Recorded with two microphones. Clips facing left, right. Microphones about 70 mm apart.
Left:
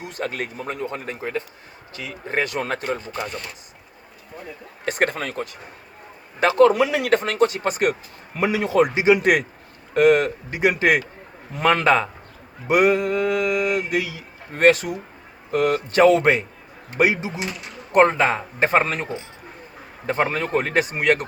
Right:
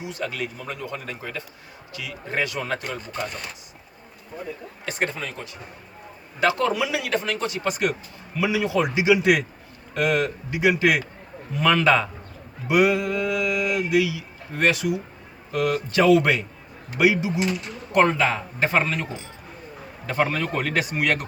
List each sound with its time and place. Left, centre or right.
0.0 s speech: left
4.9 s speech: left
6.4 s speech: left
6.8 s speech: left